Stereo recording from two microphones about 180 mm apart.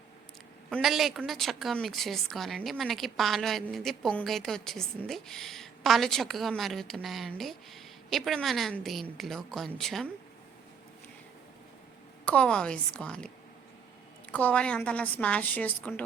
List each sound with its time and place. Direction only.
0.7 s a woman's voice: centre (ahead or behind)
12.2 s a woman's voice: 5° left (ahead or behind)